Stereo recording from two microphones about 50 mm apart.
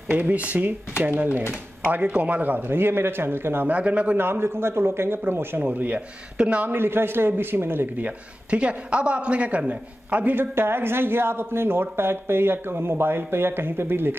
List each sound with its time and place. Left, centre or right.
0.1 s speech: right
1.9 s speech: right
3.6 s a man's voice: right
4.2 s speech: right
5.7 s speech: right
5.9 s a man's voice: centre
6.6 s speech: right
8.0 s a man's voice: right
10.3 s speech: right